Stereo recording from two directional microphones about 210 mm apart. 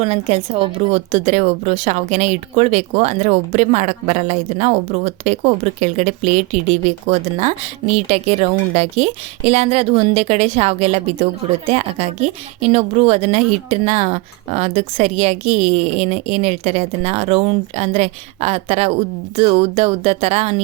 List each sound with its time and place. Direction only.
0.0 s a woman's voice: 30° right (ahead or behind)
12.5 s a woman's voice: 30° right (ahead or behind)